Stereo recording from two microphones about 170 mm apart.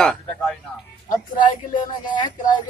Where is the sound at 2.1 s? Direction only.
25° left (ahead or behind).